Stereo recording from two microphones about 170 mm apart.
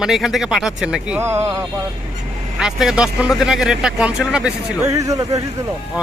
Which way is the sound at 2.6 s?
5° right (ahead or behind).